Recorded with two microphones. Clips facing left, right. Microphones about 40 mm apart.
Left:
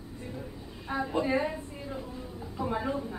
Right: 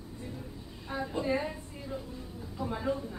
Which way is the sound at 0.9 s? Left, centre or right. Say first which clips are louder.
Left 3 dB; centre.